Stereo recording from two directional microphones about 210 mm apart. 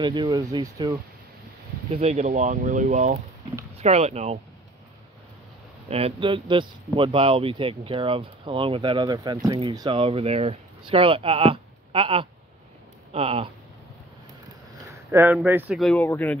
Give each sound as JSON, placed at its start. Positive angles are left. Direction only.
{"t": 0.0, "sound": "speech", "side_deg": -20}
{"t": 2.0, "sound": "speech", "side_deg": -30}
{"t": 5.9, "sound": "speech", "side_deg": -30}
{"t": 15.0, "sound": "speech", "side_deg": -10}
{"t": 15.8, "sound": "speech", "side_deg": 5}